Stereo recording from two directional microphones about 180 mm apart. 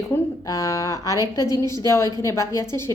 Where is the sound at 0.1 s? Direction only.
20° left (ahead or behind).